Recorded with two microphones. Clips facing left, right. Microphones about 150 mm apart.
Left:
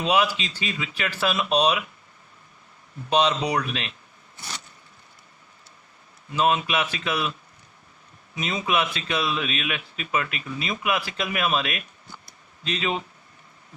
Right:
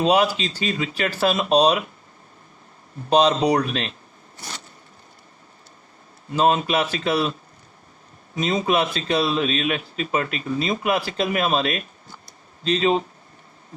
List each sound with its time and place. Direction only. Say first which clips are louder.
0.0 s speech: right 4 dB; 40° right (ahead or behind)
3.1 s speech: right 5 dB; 40° right (ahead or behind)
6.3 s speech: right 4 dB; 35° right (ahead or behind)
8.4 s speech: right 5 dB; 35° right (ahead or behind)